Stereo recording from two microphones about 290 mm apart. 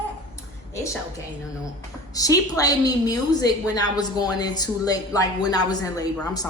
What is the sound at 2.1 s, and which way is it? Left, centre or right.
A woman's voice, centre.